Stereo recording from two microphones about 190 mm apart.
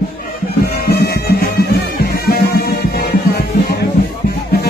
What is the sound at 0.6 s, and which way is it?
Music, 55° left (ahead or behind).